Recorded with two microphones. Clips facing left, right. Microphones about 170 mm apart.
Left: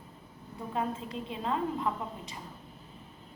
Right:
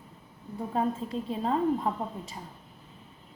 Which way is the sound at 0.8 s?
40° right (ahead or behind).